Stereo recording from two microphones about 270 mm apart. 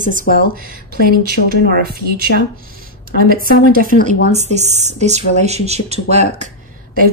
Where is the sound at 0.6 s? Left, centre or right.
Right.